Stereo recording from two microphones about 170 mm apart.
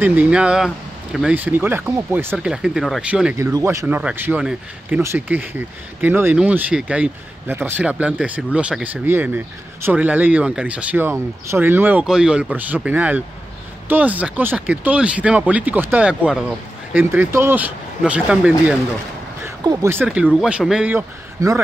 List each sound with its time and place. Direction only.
0.0 s speech: 10° right (ahead or behind)
3.3 s speech: 15° right (ahead or behind)
19.4 s speech: 20° right (ahead or behind)
20.1 s speech: 5° right (ahead or behind)